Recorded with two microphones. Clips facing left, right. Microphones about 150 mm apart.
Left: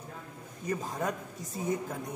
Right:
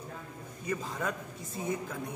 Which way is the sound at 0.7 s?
40° left (ahead or behind).